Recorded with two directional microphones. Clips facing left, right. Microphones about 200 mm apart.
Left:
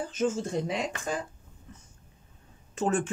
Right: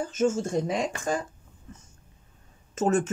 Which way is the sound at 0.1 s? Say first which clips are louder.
Right 4 dB; 45° right (ahead or behind).